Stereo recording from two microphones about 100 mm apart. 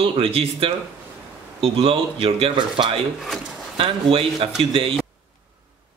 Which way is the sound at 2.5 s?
55° right (ahead or behind).